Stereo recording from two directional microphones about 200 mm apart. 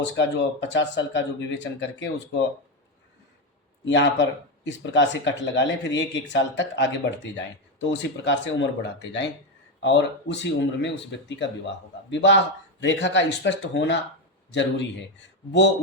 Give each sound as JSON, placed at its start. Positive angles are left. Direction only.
{"t": 0.2, "sound": "speech", "side_deg": 65}
{"t": 3.8, "sound": "speech", "side_deg": 65}